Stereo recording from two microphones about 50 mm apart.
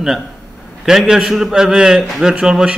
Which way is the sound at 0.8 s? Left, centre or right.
Centre.